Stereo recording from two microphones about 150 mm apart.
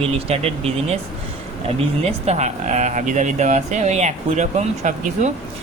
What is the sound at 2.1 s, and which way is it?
Speech, 45° right (ahead or behind).